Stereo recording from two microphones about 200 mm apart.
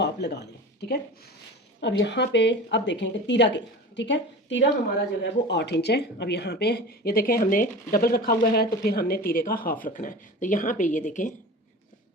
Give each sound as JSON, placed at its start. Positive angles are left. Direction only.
{"t": 0.0, "sound": "a woman's voice", "side_deg": 55}